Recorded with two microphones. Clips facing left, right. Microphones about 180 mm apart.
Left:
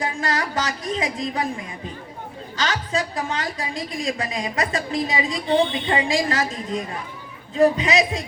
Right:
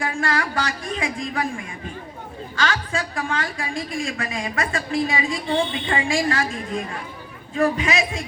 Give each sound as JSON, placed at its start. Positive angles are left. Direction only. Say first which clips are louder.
{"t": 0.0, "sound": "speech", "louder": "right 1 dB", "side_deg": 20}
{"t": 2.6, "sound": "a woman's voice", "louder": "even", "side_deg": 20}